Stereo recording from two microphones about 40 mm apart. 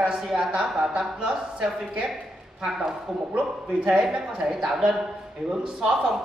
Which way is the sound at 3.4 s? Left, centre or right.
Right.